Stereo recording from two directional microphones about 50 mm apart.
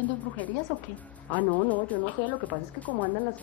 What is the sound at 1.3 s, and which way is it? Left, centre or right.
A woman's voice, left.